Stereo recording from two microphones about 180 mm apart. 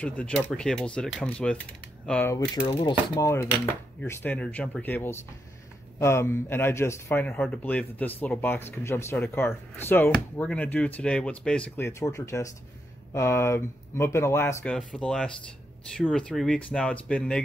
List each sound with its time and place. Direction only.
0.0 s speech: 5° left (ahead or behind)
2.5 s speech: 30° left (ahead or behind)
3.2 s speech: 15° left (ahead or behind)